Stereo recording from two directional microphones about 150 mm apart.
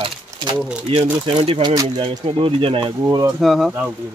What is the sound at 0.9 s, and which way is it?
Speech, 40° right (ahead or behind).